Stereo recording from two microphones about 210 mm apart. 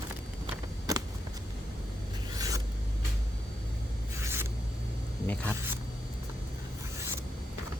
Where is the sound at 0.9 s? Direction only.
15° right (ahead or behind).